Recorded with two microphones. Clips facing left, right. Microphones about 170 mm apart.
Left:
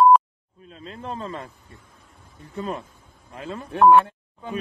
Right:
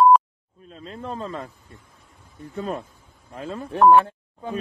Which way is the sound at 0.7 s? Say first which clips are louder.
Right 1 dB; 40° right (ahead or behind).